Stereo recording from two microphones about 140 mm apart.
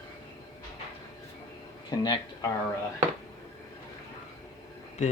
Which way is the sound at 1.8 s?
30° left (ahead or behind).